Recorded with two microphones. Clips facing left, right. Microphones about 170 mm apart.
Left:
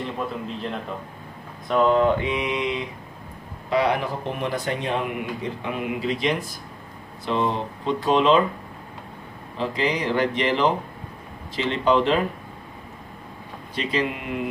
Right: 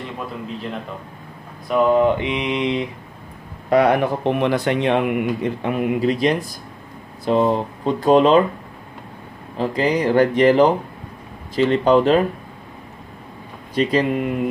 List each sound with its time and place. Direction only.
1.7 s mantra: 15° right (ahead or behind)
3.7 s speech: 55° right (ahead or behind)
9.6 s speech: 45° right (ahead or behind)
13.7 s speech: 45° right (ahead or behind)